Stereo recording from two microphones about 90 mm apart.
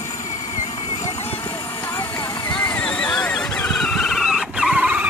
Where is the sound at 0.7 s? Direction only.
85° left.